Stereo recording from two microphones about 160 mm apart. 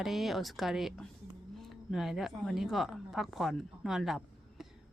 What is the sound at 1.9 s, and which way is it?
A woman's voice, centre (ahead or behind).